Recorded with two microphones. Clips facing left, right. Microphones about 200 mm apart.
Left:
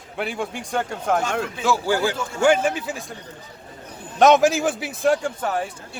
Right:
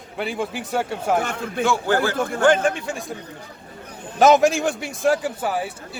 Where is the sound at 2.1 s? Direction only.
55° right (ahead or behind).